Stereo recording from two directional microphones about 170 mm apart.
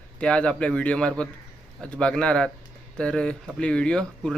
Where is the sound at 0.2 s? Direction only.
5° left (ahead or behind).